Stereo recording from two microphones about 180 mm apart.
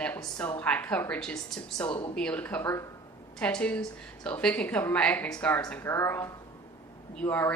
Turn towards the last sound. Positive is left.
turn(degrees=10)  # may be behind; listen again after turning